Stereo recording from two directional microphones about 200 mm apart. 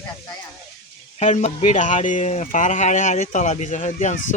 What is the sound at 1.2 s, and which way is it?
Speech, 35° left (ahead or behind).